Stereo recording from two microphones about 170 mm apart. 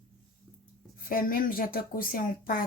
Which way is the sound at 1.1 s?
55° left (ahead or behind).